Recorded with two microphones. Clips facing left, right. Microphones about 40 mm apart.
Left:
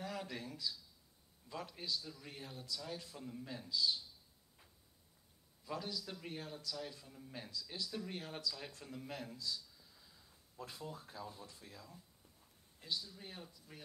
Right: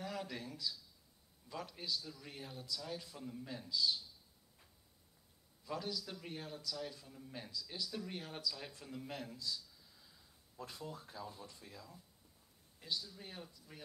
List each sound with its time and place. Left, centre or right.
0.0 s a man's voice: centre
5.7 s a man's voice: centre
10.7 s a man's voice: centre
11.4 s speech: centre
12.8 s a man's voice: centre